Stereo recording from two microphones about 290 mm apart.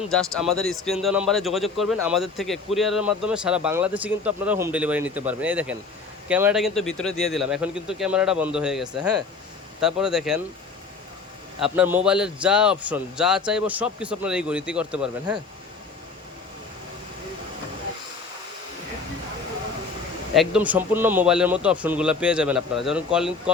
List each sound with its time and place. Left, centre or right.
0.1 s speech: centre
11.6 s speech: centre
20.3 s speech: centre